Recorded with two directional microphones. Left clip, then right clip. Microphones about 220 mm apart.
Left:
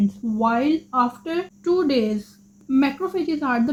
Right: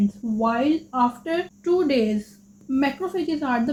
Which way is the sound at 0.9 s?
40° left (ahead or behind).